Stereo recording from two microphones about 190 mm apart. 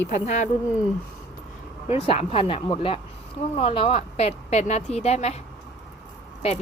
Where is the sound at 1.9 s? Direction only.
30° left (ahead or behind).